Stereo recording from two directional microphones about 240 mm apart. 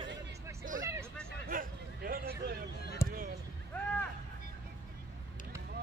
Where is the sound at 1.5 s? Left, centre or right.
Right.